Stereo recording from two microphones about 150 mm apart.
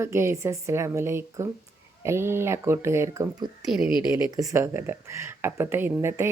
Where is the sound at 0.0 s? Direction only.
15° right (ahead or behind).